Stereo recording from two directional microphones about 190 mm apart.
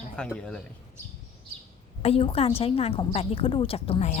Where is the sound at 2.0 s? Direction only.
30° left (ahead or behind).